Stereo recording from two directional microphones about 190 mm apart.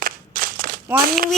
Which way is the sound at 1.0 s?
50° right (ahead or behind).